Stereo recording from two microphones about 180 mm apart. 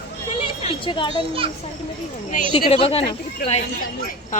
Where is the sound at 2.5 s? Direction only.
30° left (ahead or behind).